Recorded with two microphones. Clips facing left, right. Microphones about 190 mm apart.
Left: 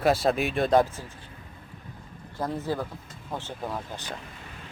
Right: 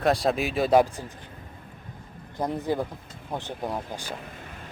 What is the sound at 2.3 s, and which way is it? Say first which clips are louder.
Speech: right 2 dB; 15° right (ahead or behind).